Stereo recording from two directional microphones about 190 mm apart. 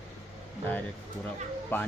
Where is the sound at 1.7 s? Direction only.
10° left (ahead or behind).